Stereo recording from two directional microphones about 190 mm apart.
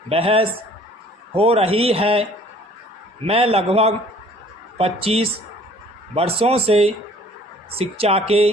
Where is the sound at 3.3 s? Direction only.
30° right (ahead or behind).